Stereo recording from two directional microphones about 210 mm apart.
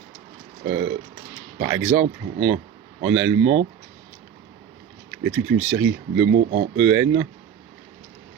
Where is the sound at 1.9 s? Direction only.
60° right (ahead or behind).